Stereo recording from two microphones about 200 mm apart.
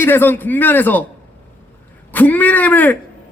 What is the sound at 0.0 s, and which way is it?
A man's voice, 10° left (ahead or behind).